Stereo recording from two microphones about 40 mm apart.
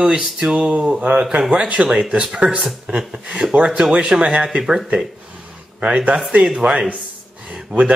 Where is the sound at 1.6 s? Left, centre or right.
Right.